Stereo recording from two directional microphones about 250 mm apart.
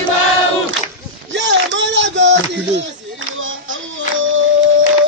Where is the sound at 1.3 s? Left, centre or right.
Right.